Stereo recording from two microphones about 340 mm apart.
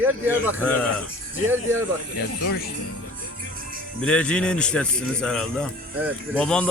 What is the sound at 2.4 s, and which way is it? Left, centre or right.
Speech, left.